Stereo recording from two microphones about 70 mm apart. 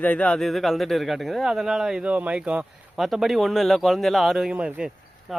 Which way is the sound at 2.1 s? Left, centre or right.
Centre.